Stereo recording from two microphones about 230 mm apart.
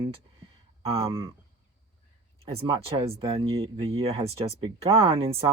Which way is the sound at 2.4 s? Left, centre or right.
Right.